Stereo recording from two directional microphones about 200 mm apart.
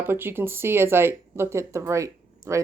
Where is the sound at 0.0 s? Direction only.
10° right (ahead or behind).